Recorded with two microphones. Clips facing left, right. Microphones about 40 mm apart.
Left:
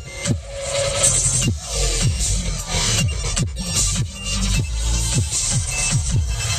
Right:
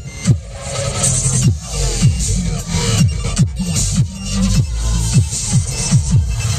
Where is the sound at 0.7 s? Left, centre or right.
Left.